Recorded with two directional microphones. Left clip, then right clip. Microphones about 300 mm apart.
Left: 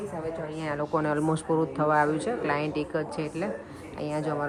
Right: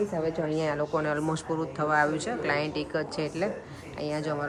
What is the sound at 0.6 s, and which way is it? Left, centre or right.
Speech, centre.